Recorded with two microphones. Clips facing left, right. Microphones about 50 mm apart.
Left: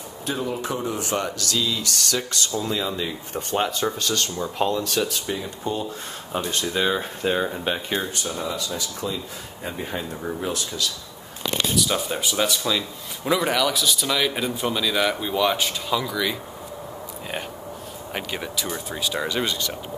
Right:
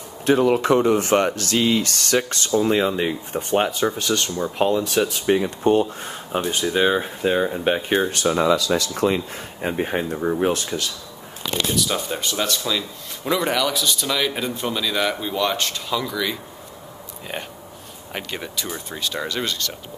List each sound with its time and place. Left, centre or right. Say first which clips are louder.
0.2 s speech: right 10 dB; right
3.3 s speech: right 3 dB; centre
5.2 s speech: right 10 dB; right
6.3 s speech: right 4 dB; centre
7.6 s speech: right 6 dB; right
8.1 s speech: right 10 dB; right
9.6 s speech: right 7 dB; right
10.0 s speech: right 7 dB; right
10.4 s speech: right 6 dB; right
11.4 s speech: even; centre
18.1 s speech: even; centre